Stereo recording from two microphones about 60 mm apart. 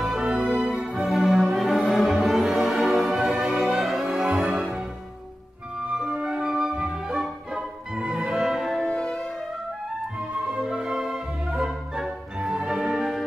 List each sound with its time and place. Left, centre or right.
0.1 s music: centre
0.5 s music: centre
4.3 s music: centre
5.9 s music: centre
8.8 s music: centre
10.3 s music: centre